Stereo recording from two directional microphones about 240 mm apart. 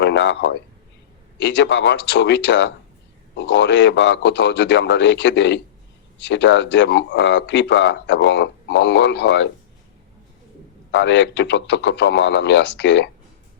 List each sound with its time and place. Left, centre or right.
0.0 s speech: left
10.9 s speech: left